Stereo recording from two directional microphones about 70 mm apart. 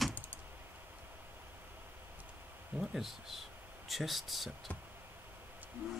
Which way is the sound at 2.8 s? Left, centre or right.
Centre.